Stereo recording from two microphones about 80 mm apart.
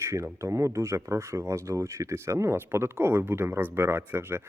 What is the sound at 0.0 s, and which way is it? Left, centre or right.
Speech, right.